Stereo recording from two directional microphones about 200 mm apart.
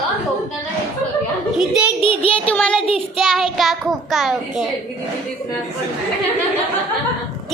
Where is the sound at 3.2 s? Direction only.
Centre (ahead or behind).